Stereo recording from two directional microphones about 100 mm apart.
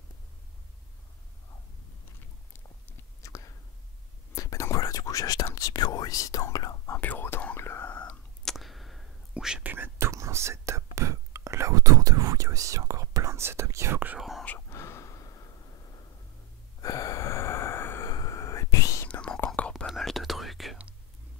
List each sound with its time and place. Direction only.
2.5 s whispering: 25° left (ahead or behind)
7.0 s whispering: 20° left (ahead or behind)
8.5 s a sound: centre (ahead or behind)
9.3 s whispering: 10° right (ahead or behind)
9.7 s whispering: 25° right (ahead or behind)
14.7 s sigh: 25° left (ahead or behind)
16.8 s gasp: 35° left (ahead or behind)
18.1 s whispering: 35° left (ahead or behind)
19.0 s whispering: 10° left (ahead or behind)
19.7 s whispering: centre (ahead or behind)